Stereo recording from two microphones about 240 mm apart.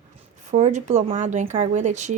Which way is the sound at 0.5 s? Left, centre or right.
Right.